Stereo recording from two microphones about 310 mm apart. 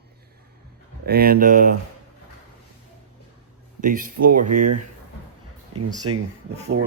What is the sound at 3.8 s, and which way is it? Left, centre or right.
Speech, right.